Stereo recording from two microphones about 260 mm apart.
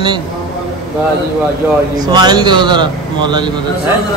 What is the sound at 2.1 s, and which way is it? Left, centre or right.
A man's voice, centre.